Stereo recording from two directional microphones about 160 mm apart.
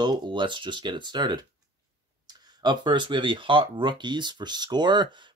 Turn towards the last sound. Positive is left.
turn(degrees=-25)  # may be behind; listen again after turning